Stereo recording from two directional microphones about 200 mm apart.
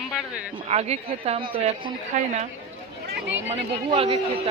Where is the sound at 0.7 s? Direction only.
30° right (ahead or behind).